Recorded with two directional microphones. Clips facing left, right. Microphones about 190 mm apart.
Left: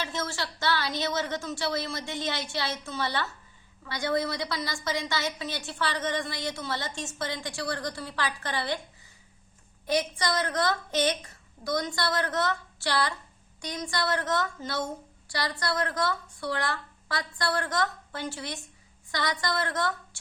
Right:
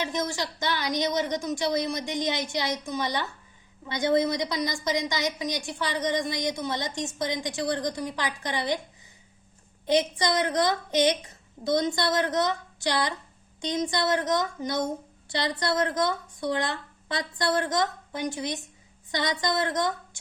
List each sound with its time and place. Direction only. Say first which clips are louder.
0.0 s a woman's voice: right 4 dB; 15° right (ahead or behind)
9.8 s a woman's voice: right 4 dB; 20° right (ahead or behind)